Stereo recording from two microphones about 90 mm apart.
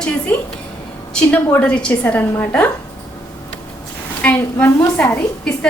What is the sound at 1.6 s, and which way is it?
A woman's voice, 15° left (ahead or behind).